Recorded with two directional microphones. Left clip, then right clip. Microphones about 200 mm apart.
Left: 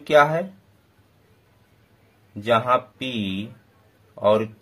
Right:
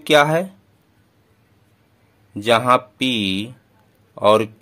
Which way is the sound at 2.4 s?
35° right (ahead or behind).